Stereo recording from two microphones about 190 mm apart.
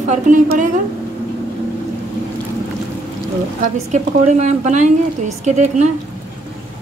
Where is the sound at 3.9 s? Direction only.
40° right (ahead or behind).